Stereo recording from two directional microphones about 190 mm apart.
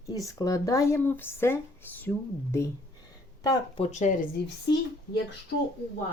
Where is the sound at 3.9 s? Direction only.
40° left (ahead or behind).